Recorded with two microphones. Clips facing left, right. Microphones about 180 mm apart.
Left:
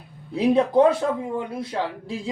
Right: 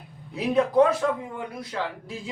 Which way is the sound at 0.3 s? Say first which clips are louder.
Left 2 dB; 30° left (ahead or behind).